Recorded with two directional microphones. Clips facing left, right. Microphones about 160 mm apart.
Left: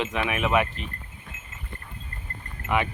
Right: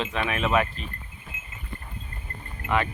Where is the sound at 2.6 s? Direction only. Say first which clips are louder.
Even; 15° left (ahead or behind).